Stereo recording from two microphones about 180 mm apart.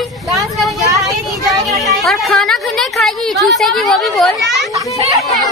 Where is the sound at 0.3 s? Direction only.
Centre (ahead or behind).